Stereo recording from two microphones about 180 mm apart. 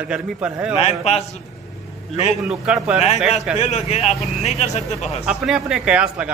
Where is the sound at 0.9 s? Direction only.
35° left (ahead or behind).